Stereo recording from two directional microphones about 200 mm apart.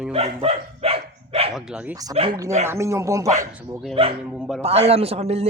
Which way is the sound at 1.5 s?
5° right (ahead or behind).